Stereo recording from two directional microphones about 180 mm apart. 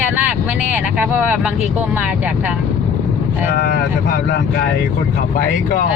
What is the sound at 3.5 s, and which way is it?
Speech, 65° left (ahead or behind).